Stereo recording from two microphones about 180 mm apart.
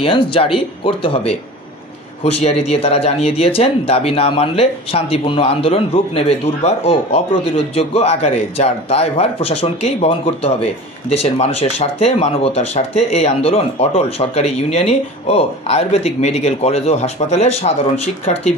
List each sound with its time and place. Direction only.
0.0 s speech: 30° left (ahead or behind)